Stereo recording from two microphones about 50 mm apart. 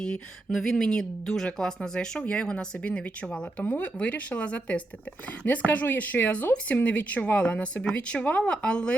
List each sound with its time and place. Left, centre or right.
0.0 s speech: centre